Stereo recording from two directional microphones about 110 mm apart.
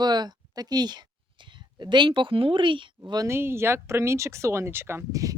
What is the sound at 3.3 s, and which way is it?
Speech, 20° right (ahead or behind).